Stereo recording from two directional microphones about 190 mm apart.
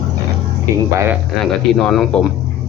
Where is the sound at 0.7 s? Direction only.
15° right (ahead or behind).